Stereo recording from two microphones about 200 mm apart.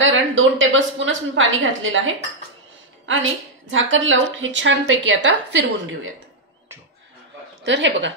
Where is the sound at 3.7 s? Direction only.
75° right (ahead or behind).